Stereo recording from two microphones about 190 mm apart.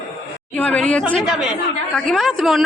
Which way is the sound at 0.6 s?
5° left (ahead or behind).